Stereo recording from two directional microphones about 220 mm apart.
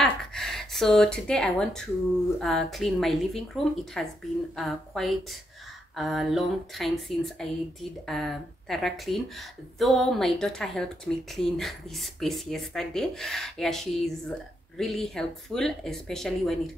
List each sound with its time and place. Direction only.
0.0 s a woman's voice: centre (ahead or behind)